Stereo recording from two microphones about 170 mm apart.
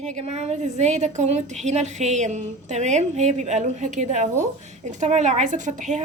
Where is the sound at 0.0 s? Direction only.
40° right (ahead or behind).